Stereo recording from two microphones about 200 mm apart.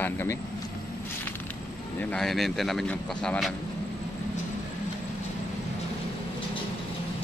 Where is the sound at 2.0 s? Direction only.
5° left (ahead or behind).